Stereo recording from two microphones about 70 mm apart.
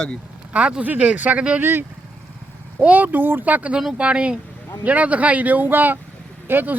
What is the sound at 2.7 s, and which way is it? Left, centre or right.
Speech, right.